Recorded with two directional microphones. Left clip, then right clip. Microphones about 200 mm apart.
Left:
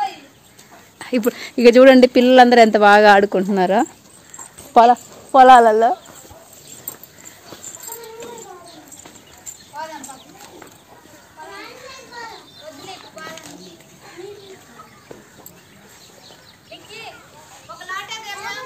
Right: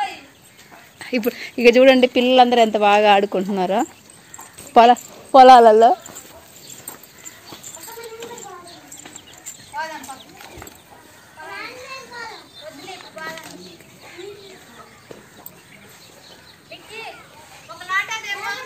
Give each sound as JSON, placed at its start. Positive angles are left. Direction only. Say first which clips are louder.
{"t": 0.9, "sound": "speech", "louder": "left 2 dB", "side_deg": 15}
{"t": 3.3, "sound": "speech", "louder": "left 4 dB", "side_deg": 20}
{"t": 4.8, "sound": "speech", "louder": "even", "side_deg": -20}